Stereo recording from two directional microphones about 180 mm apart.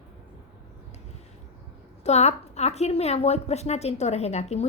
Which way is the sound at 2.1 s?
40° left (ahead or behind).